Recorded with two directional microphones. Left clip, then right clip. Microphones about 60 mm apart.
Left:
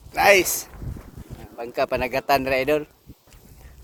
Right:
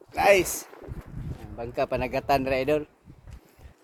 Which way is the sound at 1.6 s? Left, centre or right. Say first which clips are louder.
Left 4 dB; centre.